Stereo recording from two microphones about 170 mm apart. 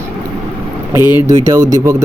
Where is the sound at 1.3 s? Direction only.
20° right (ahead or behind).